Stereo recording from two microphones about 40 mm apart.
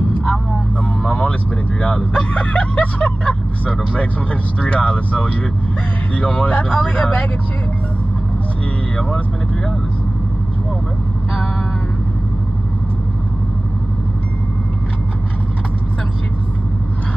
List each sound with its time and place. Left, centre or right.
1.0 s vehicle: left
1.8 s a sound: left
2.3 s vehicle: left
6.1 s speech: left